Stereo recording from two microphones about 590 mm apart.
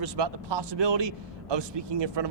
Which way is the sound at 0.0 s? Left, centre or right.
Right.